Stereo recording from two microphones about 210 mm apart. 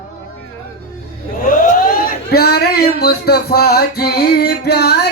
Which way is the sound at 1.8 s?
45° left (ahead or behind).